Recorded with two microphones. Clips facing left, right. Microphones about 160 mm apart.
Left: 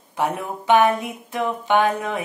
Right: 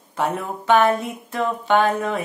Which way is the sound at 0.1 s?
15° left (ahead or behind).